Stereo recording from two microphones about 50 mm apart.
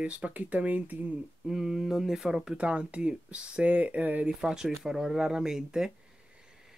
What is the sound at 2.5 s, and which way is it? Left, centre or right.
Speech, right.